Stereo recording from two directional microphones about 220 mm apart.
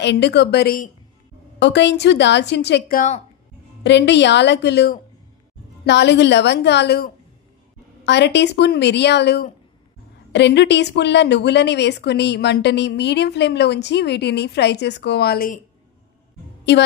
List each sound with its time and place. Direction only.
0.0 s a woman's voice: 50° left (ahead or behind)
3.0 s a woman's voice: 30° left (ahead or behind)
3.8 s a woman's voice: 50° left (ahead or behind)